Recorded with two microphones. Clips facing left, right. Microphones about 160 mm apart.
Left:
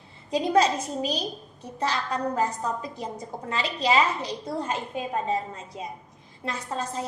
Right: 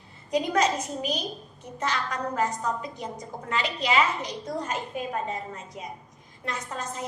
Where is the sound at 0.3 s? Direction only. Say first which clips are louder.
Left 2 dB; 30° left (ahead or behind).